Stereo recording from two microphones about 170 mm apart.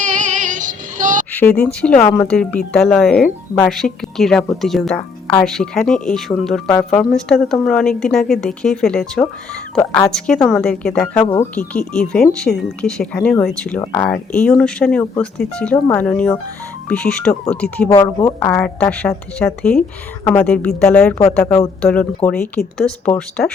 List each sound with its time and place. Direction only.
0.0 s female singing: 45° right (ahead or behind)
1.3 s speech: 10° left (ahead or behind)
17.9 s speech: 20° left (ahead or behind)
21.4 s speech: 20° left (ahead or behind)
21.8 s speech: 5° left (ahead or behind)